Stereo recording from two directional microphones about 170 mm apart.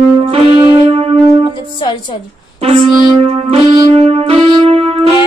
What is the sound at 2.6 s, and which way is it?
Music, 35° right (ahead or behind).